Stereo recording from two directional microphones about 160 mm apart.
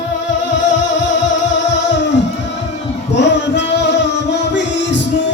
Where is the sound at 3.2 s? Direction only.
90° left.